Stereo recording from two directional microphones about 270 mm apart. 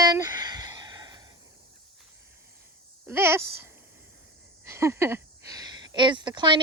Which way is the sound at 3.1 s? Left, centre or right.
Centre.